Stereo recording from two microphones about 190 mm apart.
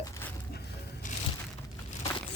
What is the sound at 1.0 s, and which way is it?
Crushing, 45° left (ahead or behind).